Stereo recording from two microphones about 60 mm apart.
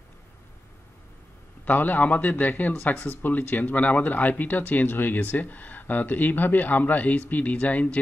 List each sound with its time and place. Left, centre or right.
1.7 s speech: left